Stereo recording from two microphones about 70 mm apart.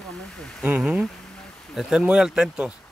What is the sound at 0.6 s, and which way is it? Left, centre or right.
Speech, centre.